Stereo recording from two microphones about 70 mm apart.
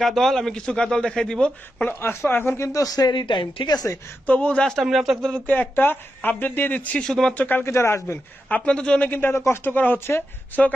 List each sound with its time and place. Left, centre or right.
0.0 s a man's voice: centre
1.9 s speech: left
2.5 s speech: left
2.8 s speech: left
4.3 s a man's voice: centre
4.8 s speech: centre
5.3 s speech: left
7.0 s a man's voice: centre
7.3 s speech: left
7.7 s speech: left
8.5 s a man's voice: centre
9.1 s speech: left